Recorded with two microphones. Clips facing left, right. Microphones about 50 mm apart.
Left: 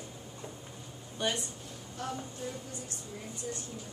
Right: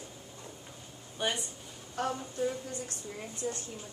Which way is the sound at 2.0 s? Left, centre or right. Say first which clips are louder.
Right 6 dB; right.